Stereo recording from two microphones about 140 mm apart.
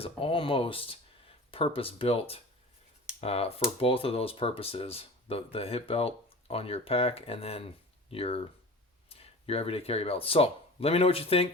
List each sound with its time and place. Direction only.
0.0 s speech: 40° left (ahead or behind)